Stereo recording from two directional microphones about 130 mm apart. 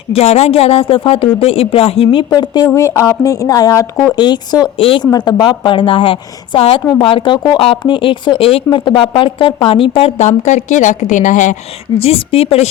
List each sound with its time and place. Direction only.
0.1 s speech: 55° left (ahead or behind)
2.3 s a woman's voice: 30° left (ahead or behind)
2.6 s speech: 20° left (ahead or behind)
4.1 s a woman's voice: 35° left (ahead or behind)
10.2 s a woman's voice: 65° left (ahead or behind)
11.9 s speech: 50° left (ahead or behind)